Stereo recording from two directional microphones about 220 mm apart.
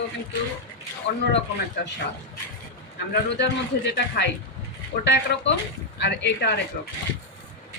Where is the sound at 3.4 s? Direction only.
50° left (ahead or behind).